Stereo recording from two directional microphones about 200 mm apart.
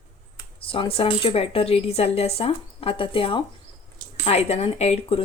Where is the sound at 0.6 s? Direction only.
25° left (ahead or behind).